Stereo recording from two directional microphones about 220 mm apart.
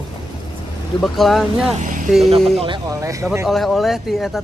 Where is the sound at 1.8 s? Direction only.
35° right (ahead or behind).